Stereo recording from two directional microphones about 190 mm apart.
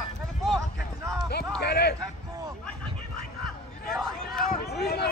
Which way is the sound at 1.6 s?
60° left (ahead or behind).